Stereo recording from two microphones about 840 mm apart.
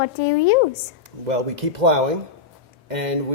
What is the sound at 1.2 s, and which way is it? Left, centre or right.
Speech, right.